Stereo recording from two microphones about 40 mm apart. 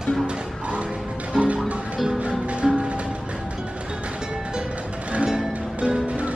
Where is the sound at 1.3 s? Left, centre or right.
Right.